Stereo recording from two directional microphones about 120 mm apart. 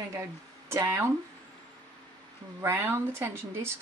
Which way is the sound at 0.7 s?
20° right (ahead or behind).